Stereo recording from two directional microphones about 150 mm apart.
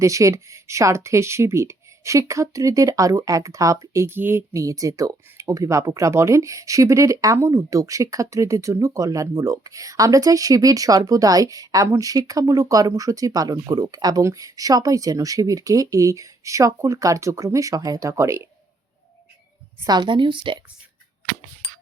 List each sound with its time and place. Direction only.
0.0 s speech: 20° right (ahead or behind)
19.9 s a woman's voice: 30° right (ahead or behind)